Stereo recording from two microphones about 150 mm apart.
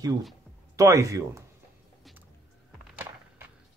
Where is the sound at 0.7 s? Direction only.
20° right (ahead or behind).